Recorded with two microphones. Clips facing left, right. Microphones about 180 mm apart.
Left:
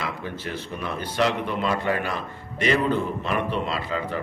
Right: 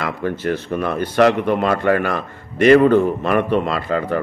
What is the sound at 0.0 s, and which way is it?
A man's voice, 60° right (ahead or behind).